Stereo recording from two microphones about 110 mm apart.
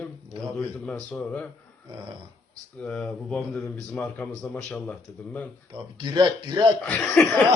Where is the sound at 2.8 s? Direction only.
10° left (ahead or behind).